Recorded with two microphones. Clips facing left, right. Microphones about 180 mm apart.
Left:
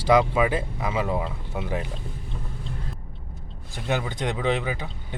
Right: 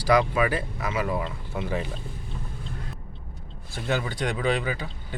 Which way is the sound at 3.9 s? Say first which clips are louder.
Left 1 dB; 20° left (ahead or behind).